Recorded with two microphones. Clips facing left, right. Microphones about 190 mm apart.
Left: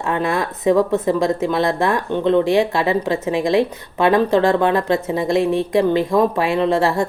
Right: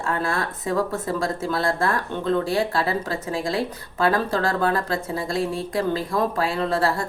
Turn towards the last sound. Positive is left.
turn(degrees=20)  # may be behind; listen again after turning